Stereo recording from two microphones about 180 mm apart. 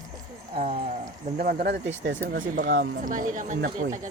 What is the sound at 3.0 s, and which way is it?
Speech, 45° right (ahead or behind).